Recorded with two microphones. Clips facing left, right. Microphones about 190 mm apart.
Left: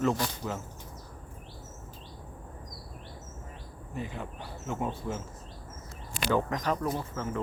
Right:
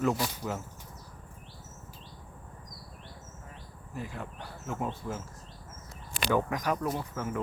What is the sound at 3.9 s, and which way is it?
Speech, centre (ahead or behind).